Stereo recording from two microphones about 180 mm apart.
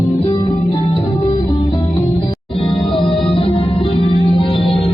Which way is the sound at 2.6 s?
30° left (ahead or behind).